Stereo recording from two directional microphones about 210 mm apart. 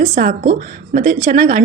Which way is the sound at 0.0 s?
45° right (ahead or behind).